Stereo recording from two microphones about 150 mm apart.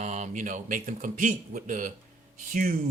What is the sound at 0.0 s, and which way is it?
Speech, 50° right (ahead or behind).